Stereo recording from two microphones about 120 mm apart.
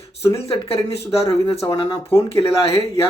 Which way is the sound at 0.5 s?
50° left (ahead or behind).